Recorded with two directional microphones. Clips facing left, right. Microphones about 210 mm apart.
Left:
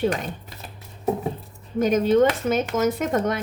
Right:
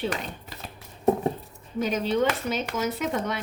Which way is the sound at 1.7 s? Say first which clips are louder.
Left 7 dB; 50° left (ahead or behind).